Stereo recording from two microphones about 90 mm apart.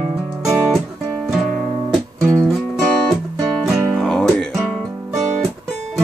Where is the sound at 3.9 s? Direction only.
5° left (ahead or behind).